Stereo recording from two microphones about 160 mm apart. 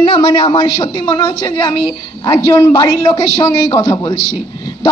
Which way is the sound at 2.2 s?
25° left (ahead or behind).